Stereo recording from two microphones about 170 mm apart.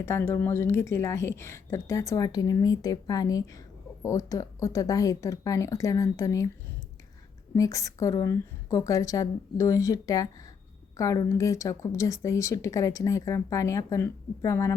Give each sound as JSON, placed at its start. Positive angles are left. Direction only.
{"t": 0.0, "sound": "a woman's voice", "side_deg": 15}
{"t": 7.5, "sound": "a woman's voice", "side_deg": 20}